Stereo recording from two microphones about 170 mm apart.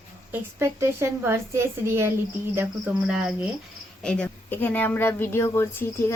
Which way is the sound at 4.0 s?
5° left (ahead or behind).